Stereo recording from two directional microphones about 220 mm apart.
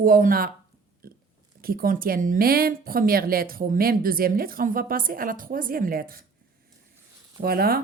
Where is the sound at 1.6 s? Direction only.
40° right (ahead or behind).